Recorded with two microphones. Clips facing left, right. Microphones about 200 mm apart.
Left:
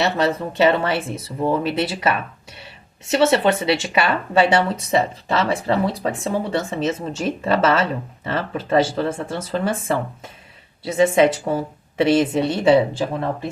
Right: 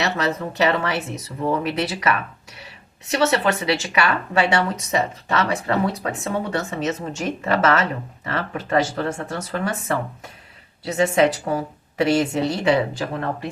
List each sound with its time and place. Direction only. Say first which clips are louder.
0.2 s speech: left 4 dB; 30° left (ahead or behind)